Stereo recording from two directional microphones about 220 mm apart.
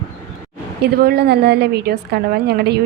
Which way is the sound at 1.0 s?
45° right (ahead or behind).